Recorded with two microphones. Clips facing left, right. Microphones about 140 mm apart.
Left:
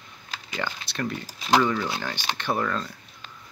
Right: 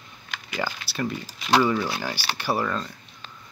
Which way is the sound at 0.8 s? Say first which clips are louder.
Right 1 dB; 5° right (ahead or behind).